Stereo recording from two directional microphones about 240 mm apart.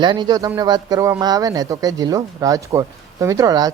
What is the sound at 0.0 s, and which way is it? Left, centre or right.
Speech, centre.